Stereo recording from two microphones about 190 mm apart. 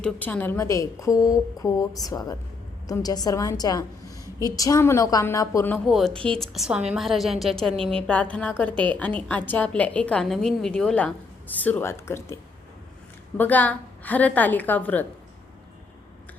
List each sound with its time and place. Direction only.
0.0 s a woman's voice: 10° left (ahead or behind)
5.7 s a woman's voice: centre (ahead or behind)